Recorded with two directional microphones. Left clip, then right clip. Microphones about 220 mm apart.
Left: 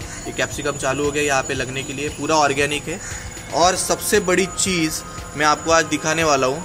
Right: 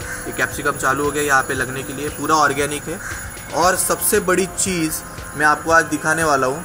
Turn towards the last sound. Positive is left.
turn(degrees=-5)  # may be behind; listen again after turning